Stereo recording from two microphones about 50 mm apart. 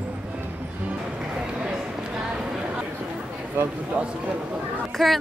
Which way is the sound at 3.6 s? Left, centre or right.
Right.